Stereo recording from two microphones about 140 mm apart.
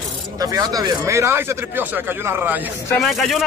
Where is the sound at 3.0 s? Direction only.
Centre (ahead or behind).